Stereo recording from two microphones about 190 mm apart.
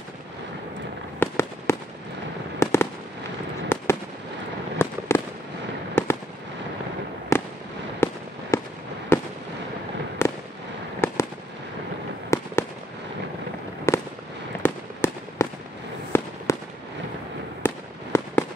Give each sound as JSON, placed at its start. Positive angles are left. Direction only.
{"t": 1.2, "sound": "fireworks", "side_deg": 15}
{"t": 7.3, "sound": "fireworks", "side_deg": 15}
{"t": 12.3, "sound": "fireworks", "side_deg": 15}
{"t": 13.9, "sound": "fireworks", "side_deg": 15}
{"t": 17.6, "sound": "fireworks", "side_deg": 10}